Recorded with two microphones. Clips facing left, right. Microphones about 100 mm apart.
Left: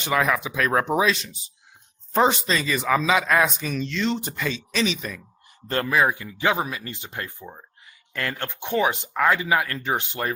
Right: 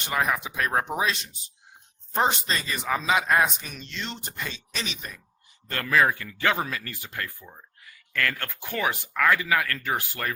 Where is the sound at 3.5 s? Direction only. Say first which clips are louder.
Left 11 dB; 90° left.